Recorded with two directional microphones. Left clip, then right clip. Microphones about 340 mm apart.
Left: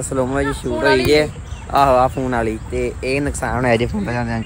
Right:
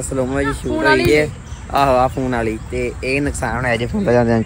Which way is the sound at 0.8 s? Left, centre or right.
Centre.